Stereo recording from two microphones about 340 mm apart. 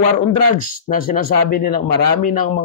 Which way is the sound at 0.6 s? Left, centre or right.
Left.